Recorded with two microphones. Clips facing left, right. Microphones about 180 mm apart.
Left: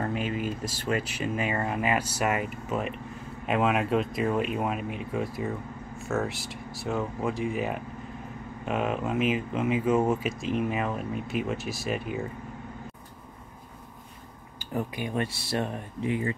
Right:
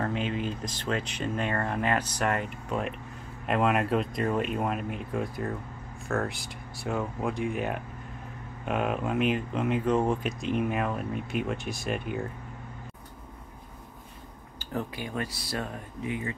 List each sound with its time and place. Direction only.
0.0 s speech: 5° left (ahead or behind)
14.6 s speech: 15° left (ahead or behind); by 16.3 s 30° left (ahead or behind)